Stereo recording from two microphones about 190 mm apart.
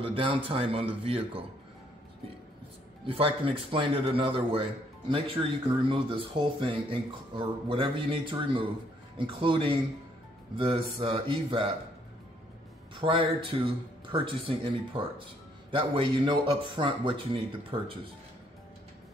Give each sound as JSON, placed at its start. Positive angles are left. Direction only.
{"t": 0.0, "sound": "speech", "side_deg": -30}
{"t": 3.1, "sound": "speech", "side_deg": -30}
{"t": 13.0, "sound": "speech", "side_deg": -25}